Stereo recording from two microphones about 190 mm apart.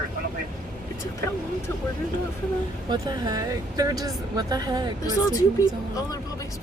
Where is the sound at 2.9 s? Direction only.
20° right (ahead or behind).